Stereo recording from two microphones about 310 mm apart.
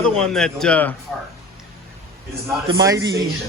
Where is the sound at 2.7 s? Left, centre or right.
Centre.